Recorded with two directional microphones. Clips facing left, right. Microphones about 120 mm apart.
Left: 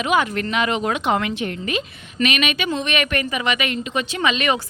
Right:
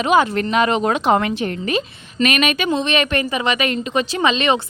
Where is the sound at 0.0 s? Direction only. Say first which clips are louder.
Right 4 dB; 35° right (ahead or behind).